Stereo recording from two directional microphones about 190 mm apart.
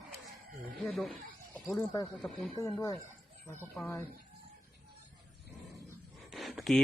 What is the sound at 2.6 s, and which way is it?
Speech, 15° left (ahead or behind).